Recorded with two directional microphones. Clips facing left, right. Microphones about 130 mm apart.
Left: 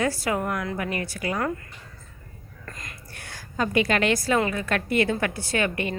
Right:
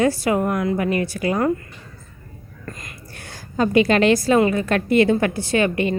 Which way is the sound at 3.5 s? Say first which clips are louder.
Right 7 dB; 25° right (ahead or behind).